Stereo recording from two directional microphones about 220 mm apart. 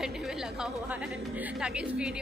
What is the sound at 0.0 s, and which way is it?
A woman's voice, centre (ahead or behind).